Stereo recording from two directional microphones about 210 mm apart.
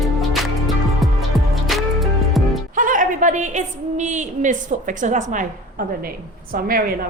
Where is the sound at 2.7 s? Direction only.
40° right (ahead or behind).